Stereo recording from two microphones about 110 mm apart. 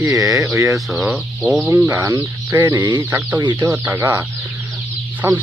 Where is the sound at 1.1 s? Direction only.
10° right (ahead or behind).